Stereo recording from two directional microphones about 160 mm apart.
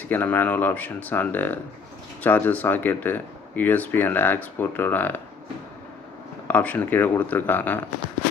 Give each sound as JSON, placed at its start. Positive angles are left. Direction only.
{"t": 0.1, "sound": "speech", "side_deg": 10}
{"t": 6.5, "sound": "speech", "side_deg": 10}